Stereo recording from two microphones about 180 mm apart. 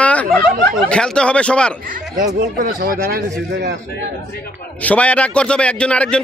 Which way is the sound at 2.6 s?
50° right (ahead or behind).